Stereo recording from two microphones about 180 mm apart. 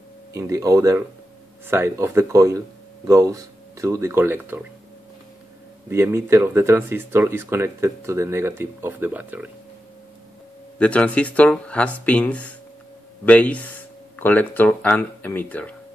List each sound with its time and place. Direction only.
0.3 s speech: 20° right (ahead or behind)
5.9 s speech: 15° right (ahead or behind)
10.8 s speech: 5° left (ahead or behind)